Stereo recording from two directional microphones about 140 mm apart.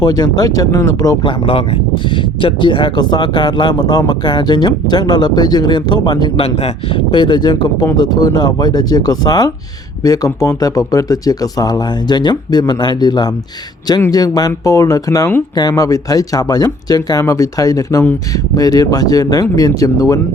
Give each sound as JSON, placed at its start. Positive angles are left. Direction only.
{"t": 0.0, "sound": "speech", "side_deg": 30}
{"t": 1.2, "sound": "speech", "side_deg": 40}